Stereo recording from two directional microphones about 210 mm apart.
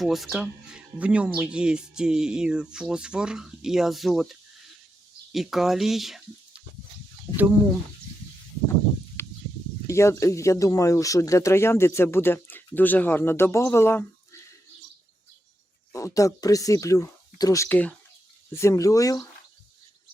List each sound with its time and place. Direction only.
0.0 s speech: centre (ahead or behind)
9.2 s a sound: 10° left (ahead or behind)
9.8 s speech: 15° left (ahead or behind)
15.9 s speech: 15° left (ahead or behind)